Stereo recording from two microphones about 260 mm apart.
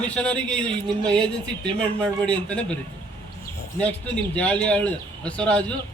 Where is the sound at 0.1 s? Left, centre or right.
Centre.